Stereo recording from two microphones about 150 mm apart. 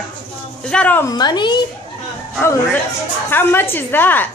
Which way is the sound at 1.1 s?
30° left (ahead or behind).